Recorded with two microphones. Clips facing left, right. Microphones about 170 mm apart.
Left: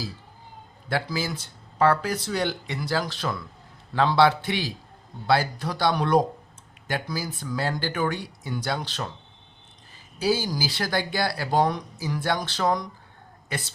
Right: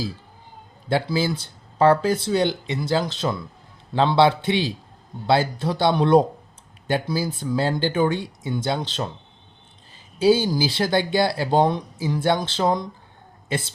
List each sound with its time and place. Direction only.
0.9 s speech: 25° right (ahead or behind)
10.2 s speech: 25° right (ahead or behind)